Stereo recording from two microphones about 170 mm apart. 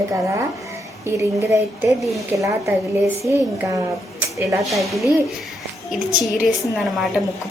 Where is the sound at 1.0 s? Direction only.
15° right (ahead or behind).